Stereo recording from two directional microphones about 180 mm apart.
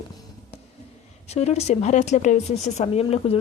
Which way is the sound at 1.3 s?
35° left (ahead or behind).